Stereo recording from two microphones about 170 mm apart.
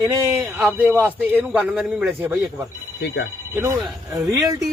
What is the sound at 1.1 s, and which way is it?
A man's voice, 10° right (ahead or behind).